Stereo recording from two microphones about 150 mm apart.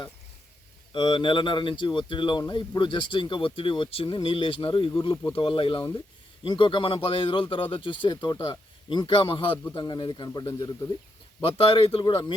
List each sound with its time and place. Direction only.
0.9 s speech: 30° left (ahead or behind)
11.3 s speech: 35° left (ahead or behind)